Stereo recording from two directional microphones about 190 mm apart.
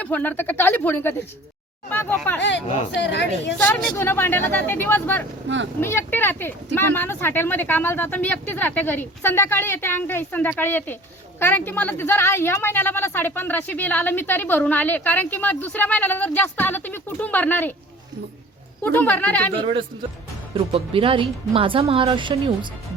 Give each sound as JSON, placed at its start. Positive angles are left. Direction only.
{"t": 0.0, "sound": "speech", "side_deg": 10}
{"t": 2.4, "sound": "speech", "side_deg": 70}
{"t": 3.6, "sound": "speech", "side_deg": 10}
{"t": 5.5, "sound": "speech", "side_deg": -75}
{"t": 5.8, "sound": "speech", "side_deg": 10}
{"t": 18.8, "sound": "speech", "side_deg": 10}
{"t": 20.5, "sound": "speech", "side_deg": -30}